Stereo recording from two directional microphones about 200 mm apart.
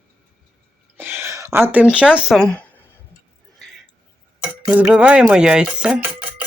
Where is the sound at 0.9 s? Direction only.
10° right (ahead or behind).